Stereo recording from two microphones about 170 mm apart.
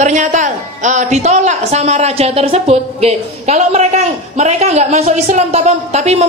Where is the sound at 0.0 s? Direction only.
45° right (ahead or behind).